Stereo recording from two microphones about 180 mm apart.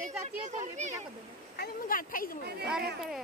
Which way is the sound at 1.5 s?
55° left (ahead or behind).